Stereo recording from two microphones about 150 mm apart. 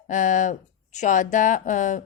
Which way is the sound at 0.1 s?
55° left (ahead or behind).